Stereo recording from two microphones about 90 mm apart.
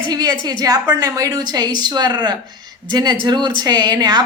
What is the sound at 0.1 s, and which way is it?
Speech, 50° right (ahead or behind).